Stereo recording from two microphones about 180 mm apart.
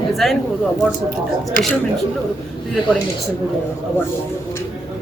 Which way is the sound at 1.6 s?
50° right (ahead or behind).